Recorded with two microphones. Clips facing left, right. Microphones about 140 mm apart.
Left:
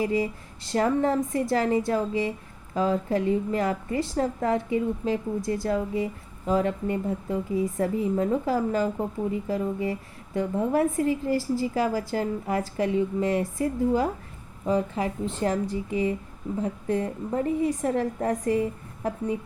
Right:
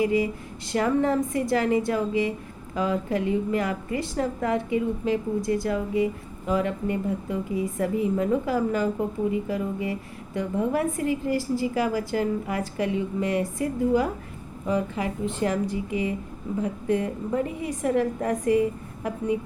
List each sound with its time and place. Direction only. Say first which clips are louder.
0.0 s a woman's voice: right 2 dB; 35° left (ahead or behind)